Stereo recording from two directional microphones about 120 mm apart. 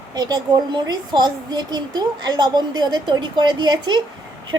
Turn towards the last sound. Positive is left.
turn(degrees=-40)  # may be behind; listen again after turning